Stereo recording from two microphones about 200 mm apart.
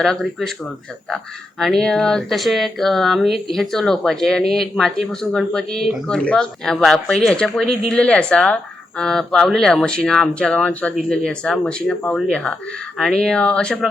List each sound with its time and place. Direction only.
0.0 s speech: centre (ahead or behind)